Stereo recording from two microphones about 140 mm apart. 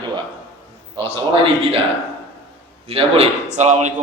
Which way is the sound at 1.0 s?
40° right (ahead or behind).